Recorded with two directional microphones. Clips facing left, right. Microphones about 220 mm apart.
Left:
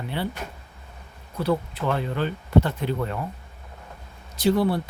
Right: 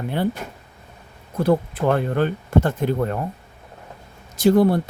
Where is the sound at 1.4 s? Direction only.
50° right (ahead or behind).